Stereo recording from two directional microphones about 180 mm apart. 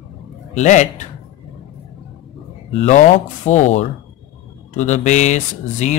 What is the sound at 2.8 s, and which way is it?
Speech, 40° left (ahead or behind).